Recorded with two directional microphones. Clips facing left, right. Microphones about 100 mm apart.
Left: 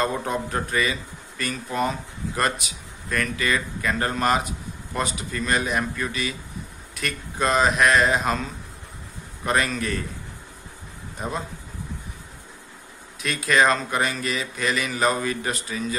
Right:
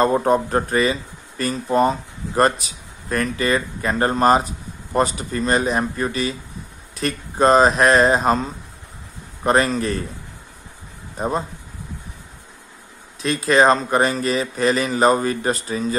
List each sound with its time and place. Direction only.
0.0 s speech: 40° right (ahead or behind)
11.1 s speech: 35° right (ahead or behind)
13.2 s speech: 30° right (ahead or behind)